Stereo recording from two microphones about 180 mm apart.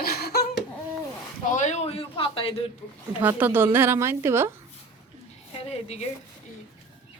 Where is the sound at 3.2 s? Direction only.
10° right (ahead or behind).